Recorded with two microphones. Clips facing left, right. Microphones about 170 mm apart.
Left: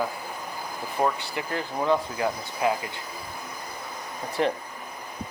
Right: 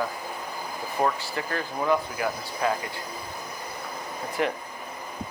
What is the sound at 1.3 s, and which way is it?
Speech, 20° left (ahead or behind).